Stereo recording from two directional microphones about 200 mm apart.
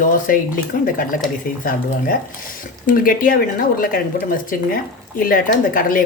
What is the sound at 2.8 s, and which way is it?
Speech, 45° left (ahead or behind).